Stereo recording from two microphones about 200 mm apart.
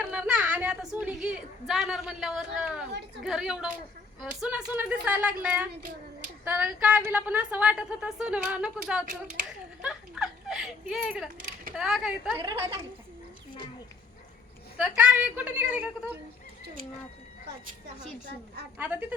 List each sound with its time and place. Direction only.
0.0 s a woman's voice: 5° right (ahead or behind)
12.4 s a woman's voice: 20° right (ahead or behind)
14.8 s speech: 5° right (ahead or behind)
18.8 s speech: 5° right (ahead or behind)